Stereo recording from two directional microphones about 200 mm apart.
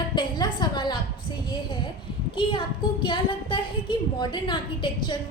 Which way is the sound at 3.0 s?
25° left (ahead or behind).